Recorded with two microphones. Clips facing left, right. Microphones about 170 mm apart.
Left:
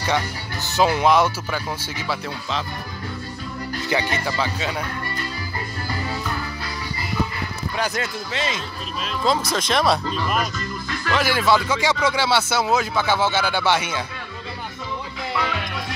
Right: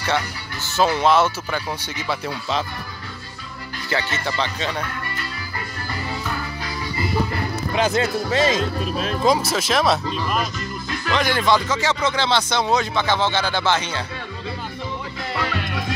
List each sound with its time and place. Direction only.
0.7 s speech: 15° left (ahead or behind)
3.9 s speech: 10° left (ahead or behind)
7.7 s speech: 25° right (ahead or behind)
8.3 s speech: 40° right (ahead or behind)
9.5 s speech: 5° right (ahead or behind)
15.3 s music: 55° right (ahead or behind)